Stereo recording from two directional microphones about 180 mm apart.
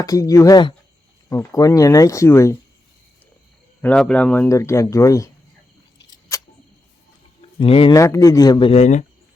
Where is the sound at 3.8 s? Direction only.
5° left (ahead or behind).